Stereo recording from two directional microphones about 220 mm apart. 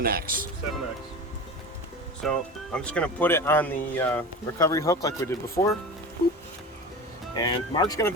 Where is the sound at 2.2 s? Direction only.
Centre (ahead or behind).